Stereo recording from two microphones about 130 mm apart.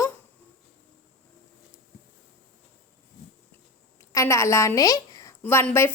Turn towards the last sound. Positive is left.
turn(degrees=15)  # may be behind; listen again after turning